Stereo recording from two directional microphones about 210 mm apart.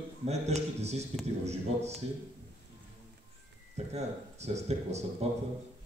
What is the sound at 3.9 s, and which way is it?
Speech, 30° right (ahead or behind).